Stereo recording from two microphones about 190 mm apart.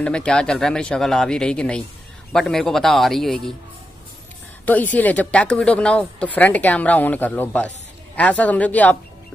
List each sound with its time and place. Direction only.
0.0 s speech: 5° left (ahead or behind)
4.9 s speech: 10° left (ahead or behind)